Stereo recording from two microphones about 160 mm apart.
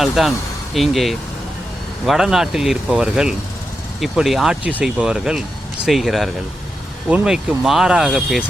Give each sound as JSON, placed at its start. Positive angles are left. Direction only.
{"t": 0.0, "sound": "speech", "side_deg": 0}